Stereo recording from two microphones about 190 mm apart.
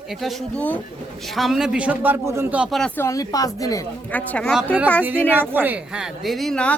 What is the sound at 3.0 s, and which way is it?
A woman's voice, 15° left (ahead or behind).